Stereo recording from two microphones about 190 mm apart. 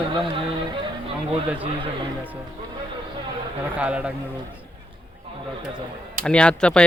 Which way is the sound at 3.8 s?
5° right (ahead or behind).